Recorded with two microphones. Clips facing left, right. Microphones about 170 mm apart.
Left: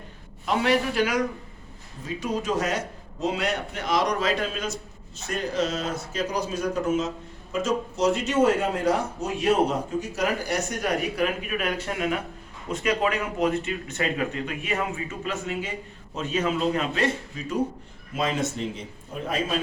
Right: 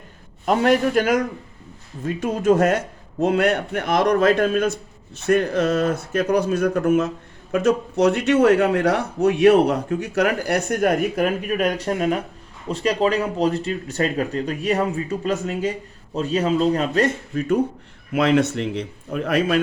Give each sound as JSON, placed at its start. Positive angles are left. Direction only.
{"t": 0.4, "sound": "a man's voice", "side_deg": -50}
{"t": 17.3, "sound": "a man's voice", "side_deg": -55}
{"t": 18.1, "sound": "a man's voice", "side_deg": -70}